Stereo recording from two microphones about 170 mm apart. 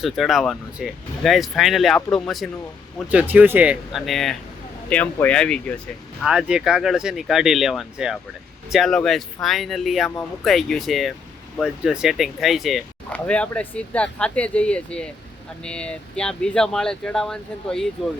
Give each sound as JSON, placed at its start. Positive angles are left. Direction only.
{"t": 0.0, "sound": "speech", "side_deg": 0}
{"t": 6.2, "sound": "speech", "side_deg": -5}